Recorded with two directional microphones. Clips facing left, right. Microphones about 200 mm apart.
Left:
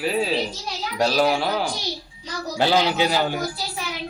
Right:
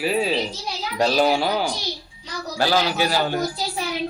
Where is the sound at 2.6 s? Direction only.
20° left (ahead or behind).